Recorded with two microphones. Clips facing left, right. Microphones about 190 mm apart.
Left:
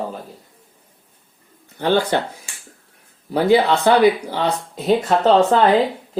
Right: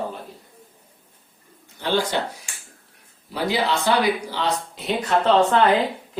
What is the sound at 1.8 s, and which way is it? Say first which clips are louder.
Speech: left 5 dB; 55° left (ahead or behind).